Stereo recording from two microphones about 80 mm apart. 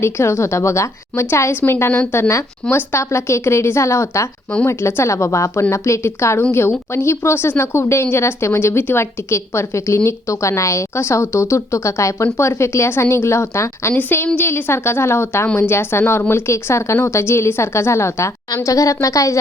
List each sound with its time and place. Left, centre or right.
0.0 s speech: left